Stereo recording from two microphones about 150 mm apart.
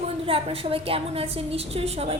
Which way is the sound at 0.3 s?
40° right (ahead or behind).